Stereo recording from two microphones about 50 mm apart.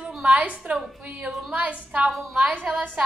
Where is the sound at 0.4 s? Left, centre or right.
Right.